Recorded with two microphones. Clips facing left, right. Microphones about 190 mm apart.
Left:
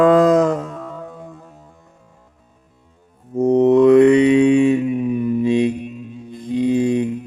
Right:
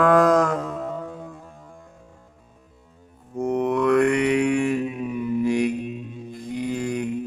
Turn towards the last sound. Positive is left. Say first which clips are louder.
# left 9 dB
turn(degrees=20)  # may be behind; listen again after turning